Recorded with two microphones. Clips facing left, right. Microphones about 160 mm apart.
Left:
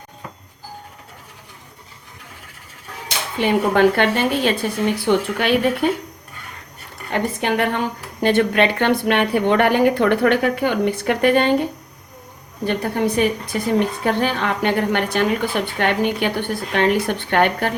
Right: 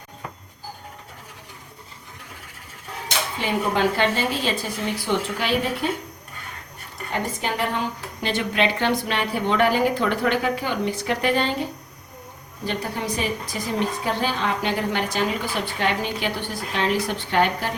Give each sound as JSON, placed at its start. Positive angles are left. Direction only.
{"t": 3.3, "sound": "a woman's voice", "side_deg": 60}
{"t": 7.1, "sound": "a woman's voice", "side_deg": 60}
{"t": 12.6, "sound": "a woman's voice", "side_deg": 55}